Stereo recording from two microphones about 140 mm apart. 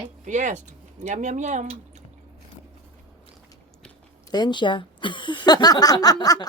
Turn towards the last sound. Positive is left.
turn(degrees=30)  # may be behind; listen again after turning